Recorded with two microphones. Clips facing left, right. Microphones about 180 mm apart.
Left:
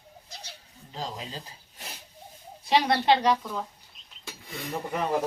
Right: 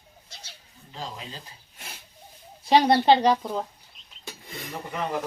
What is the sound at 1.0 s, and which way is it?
Speech, 35° left (ahead or behind).